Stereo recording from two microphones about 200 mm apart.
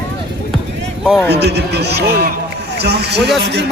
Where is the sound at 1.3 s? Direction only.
55° right (ahead or behind).